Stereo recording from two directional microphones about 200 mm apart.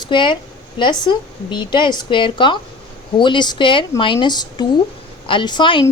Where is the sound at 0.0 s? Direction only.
25° left (ahead or behind).